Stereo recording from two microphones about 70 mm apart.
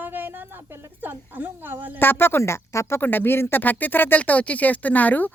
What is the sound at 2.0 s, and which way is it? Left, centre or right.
Speech, left.